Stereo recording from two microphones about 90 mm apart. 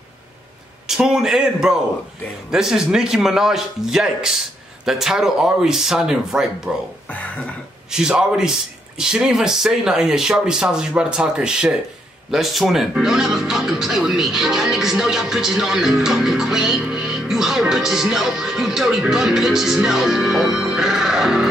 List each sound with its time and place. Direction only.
0.8 s speech: 5° right (ahead or behind)
7.1 s cough: 15° left (ahead or behind)
7.9 s speech: 5° right (ahead or behind)